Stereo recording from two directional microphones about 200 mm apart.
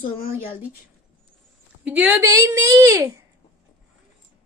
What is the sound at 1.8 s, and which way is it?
A woman's voice, 5° right (ahead or behind).